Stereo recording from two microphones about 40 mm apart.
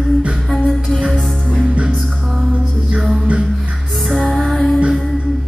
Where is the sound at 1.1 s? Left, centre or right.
Centre.